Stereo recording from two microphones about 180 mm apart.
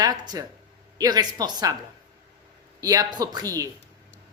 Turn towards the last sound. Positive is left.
turn(degrees=-20)  # may be behind; listen again after turning